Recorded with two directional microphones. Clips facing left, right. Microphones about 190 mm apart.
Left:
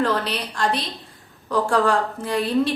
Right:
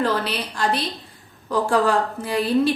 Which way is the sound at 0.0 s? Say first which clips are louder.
Even; 5° right (ahead or behind).